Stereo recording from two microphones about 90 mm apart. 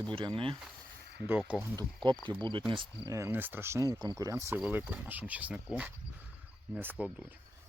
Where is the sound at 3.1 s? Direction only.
35° right (ahead or behind).